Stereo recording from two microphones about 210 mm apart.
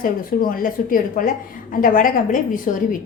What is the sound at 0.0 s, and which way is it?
Speech, 40° left (ahead or behind).